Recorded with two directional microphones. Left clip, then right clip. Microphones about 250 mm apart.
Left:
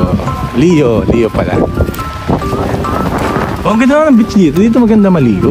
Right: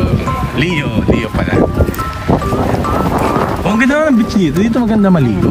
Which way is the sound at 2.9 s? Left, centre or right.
Centre.